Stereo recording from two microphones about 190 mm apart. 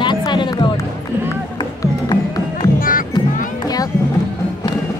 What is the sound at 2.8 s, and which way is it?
Music, 45° left (ahead or behind).